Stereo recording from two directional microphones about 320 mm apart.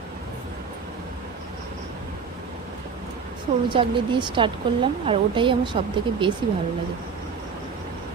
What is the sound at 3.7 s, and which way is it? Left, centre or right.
Speech, centre.